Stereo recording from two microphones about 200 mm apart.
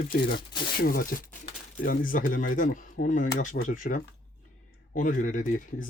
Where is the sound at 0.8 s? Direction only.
45° left (ahead or behind).